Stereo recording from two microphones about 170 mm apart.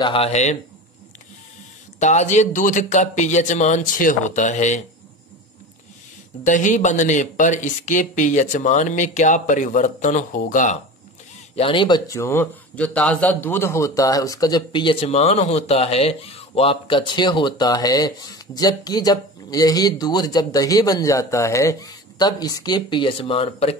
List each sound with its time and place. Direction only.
0.0 s speech: 35° left (ahead or behind)
2.0 s speech: 45° left (ahead or behind)
6.4 s speech: 45° left (ahead or behind)
11.5 s a man's voice: 30° left (ahead or behind)